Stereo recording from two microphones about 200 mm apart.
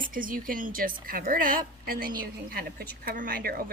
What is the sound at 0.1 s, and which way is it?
A woman's voice, 45° right (ahead or behind).